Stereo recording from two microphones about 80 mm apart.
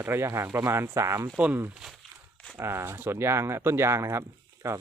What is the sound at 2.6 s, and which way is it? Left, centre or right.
Speech, right.